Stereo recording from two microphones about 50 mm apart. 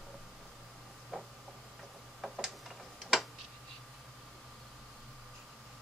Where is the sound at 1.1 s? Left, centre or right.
Centre.